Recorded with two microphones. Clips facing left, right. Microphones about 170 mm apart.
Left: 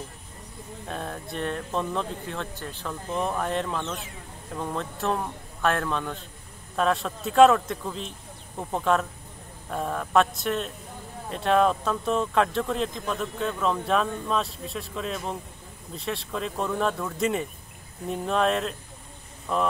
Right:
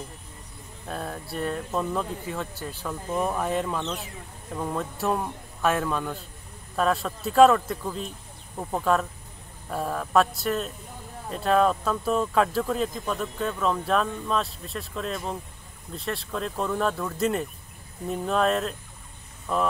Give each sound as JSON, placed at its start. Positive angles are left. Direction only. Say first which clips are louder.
{"t": 0.8, "sound": "speech", "louder": "right 1 dB", "side_deg": 0}